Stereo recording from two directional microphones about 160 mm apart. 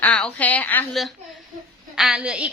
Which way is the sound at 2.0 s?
5° right (ahead or behind).